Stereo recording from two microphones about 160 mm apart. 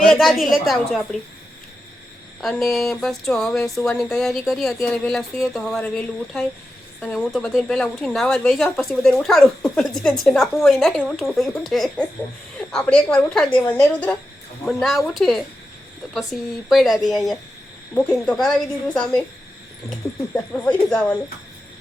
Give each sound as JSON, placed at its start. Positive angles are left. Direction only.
{"t": 0.1, "sound": "speech", "side_deg": 0}
{"t": 2.4, "sound": "a woman's voice", "side_deg": 0}
{"t": 20.3, "sound": "a woman's voice", "side_deg": 10}